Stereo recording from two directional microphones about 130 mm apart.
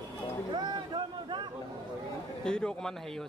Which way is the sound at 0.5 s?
35° right (ahead or behind).